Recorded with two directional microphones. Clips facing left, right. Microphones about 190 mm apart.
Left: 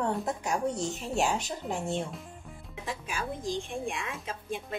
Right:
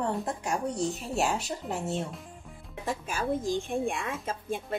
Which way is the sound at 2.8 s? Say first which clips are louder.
Right 5 dB; 45° right (ahead or behind).